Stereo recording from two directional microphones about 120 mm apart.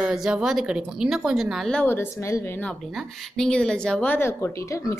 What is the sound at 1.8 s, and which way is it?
Speech, 20° left (ahead or behind).